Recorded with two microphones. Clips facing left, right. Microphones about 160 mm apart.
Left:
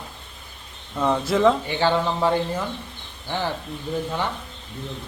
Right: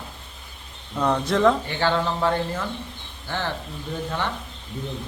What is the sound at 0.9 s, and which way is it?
A man's voice, 5° left (ahead or behind).